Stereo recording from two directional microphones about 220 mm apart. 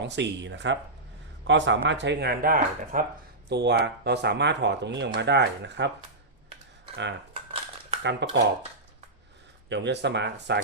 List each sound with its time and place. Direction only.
0.0 s speech: 55° right (ahead or behind)
7.3 s crumpling: 25° right (ahead or behind)
8.0 s speech: 55° right (ahead or behind)
9.6 s speech: 50° right (ahead or behind)